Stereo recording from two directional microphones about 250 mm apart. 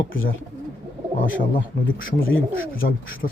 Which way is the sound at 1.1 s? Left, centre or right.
Left.